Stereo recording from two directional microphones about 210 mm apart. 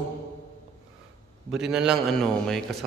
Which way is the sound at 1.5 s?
5° right (ahead or behind).